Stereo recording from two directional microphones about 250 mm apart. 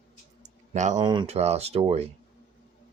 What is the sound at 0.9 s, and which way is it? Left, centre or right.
Speech, centre.